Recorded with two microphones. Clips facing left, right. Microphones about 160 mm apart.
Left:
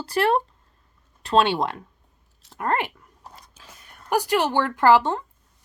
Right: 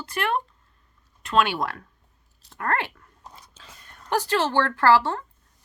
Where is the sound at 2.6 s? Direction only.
15° left (ahead or behind).